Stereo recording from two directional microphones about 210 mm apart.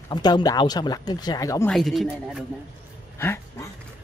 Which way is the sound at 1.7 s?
Centre (ahead or behind).